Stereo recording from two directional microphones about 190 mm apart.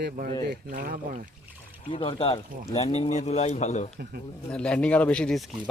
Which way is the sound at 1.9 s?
30° left (ahead or behind).